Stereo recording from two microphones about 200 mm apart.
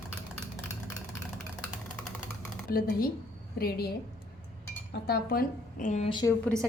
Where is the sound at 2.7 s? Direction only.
45° left (ahead or behind).